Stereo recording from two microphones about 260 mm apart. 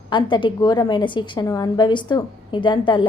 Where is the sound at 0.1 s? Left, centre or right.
Centre.